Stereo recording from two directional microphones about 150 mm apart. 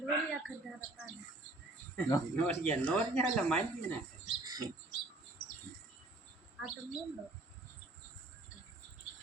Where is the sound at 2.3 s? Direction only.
10° left (ahead or behind).